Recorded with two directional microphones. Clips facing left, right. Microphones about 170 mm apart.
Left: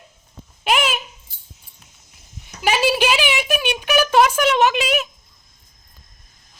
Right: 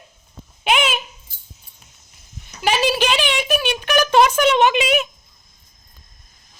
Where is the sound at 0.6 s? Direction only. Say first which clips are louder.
Right 1 dB; centre (ahead or behind).